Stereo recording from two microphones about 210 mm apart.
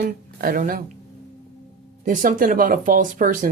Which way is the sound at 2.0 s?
40° right (ahead or behind).